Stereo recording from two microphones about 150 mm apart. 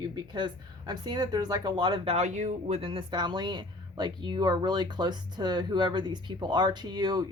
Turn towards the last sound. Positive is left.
turn(degrees=-30)  # may be behind; listen again after turning